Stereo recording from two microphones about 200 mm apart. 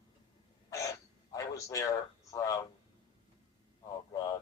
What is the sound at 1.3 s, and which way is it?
A man's voice, 15° left (ahead or behind).